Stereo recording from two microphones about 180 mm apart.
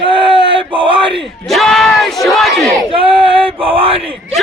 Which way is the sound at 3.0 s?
30° right (ahead or behind).